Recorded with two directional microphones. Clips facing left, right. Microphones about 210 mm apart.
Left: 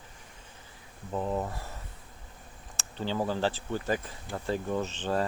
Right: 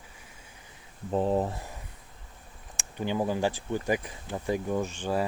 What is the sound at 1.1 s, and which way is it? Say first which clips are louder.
Speech: right 5 dB; 30° right (ahead or behind).